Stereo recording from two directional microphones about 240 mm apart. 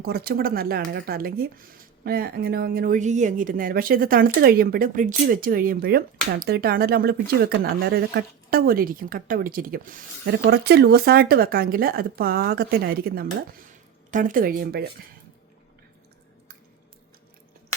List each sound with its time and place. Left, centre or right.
0.0 s speech: right